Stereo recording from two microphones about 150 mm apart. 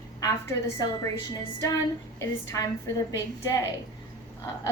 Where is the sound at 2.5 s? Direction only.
20° left (ahead or behind).